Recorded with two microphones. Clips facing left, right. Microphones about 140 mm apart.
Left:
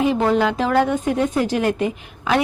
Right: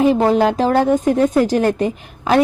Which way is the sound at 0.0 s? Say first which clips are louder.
Right 4 dB; 40° right (ahead or behind).